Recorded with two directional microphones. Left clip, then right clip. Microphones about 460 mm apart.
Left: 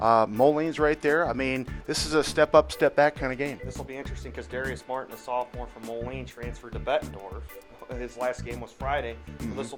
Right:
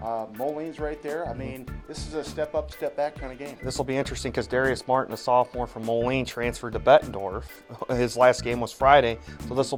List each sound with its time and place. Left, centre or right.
0.0 s speech: left
3.7 s speech: right